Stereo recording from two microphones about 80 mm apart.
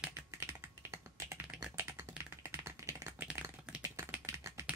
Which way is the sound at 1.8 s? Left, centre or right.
Right.